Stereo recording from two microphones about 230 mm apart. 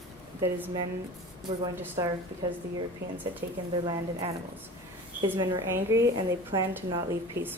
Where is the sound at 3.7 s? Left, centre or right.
Centre.